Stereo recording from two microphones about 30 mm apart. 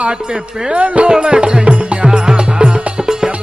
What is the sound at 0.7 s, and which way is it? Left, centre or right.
Speech, right.